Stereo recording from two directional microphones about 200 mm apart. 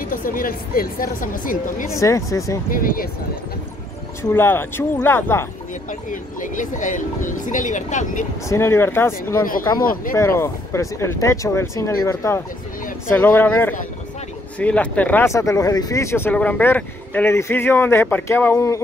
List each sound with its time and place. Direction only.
0.0 s speech: 45° left (ahead or behind)
1.9 s speech: 15° left (ahead or behind)
2.7 s speech: 45° left (ahead or behind)
4.2 s speech: 10° left (ahead or behind)
6.4 s speech: 40° left (ahead or behind)
8.5 s speech: 10° left (ahead or behind)
9.8 s speech: 45° left (ahead or behind)
10.1 s speech: 15° left (ahead or behind)